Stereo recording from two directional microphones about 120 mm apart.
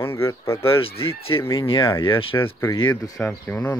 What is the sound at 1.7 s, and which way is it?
Speech, 45° left (ahead or behind).